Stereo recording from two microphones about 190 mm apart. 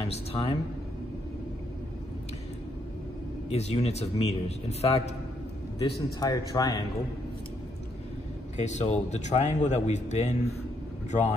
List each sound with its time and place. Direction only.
0.0 s speech: 30° left (ahead or behind)
3.4 s a man's voice: 35° left (ahead or behind)
6.1 s speech: 20° left (ahead or behind)
8.5 s a man's voice: 35° left (ahead or behind)